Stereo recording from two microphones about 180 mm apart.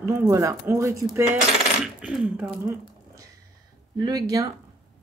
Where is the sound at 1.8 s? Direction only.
5° right (ahead or behind).